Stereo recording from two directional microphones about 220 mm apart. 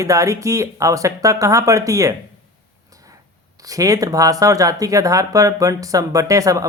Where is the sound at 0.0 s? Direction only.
15° right (ahead or behind).